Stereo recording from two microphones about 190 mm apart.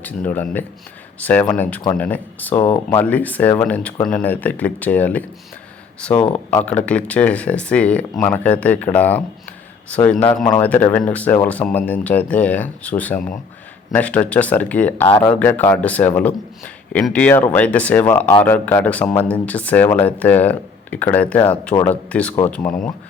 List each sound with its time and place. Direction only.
0.3 s speech: 10° left (ahead or behind)
15.0 s speech: 25° left (ahead or behind)
15.3 s speech: 10° left (ahead or behind)